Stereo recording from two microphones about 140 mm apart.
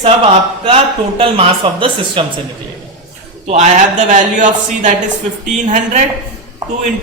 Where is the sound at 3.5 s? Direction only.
60° right (ahead or behind).